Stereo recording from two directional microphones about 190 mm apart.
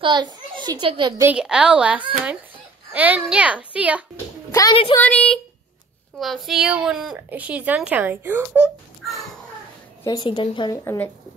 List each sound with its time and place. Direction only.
0.0 s a child's voice: 25° right (ahead or behind)
1.2 s a woman's voice: 5° right (ahead or behind)
4.5 s a woman's voice: 20° left (ahead or behind)
5.0 s a woman's voice: 5° left (ahead or behind)
10.0 s a woman's voice: 20° left (ahead or behind)